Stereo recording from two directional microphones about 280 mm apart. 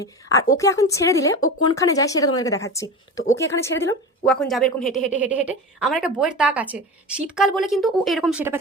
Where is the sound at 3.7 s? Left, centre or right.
Left.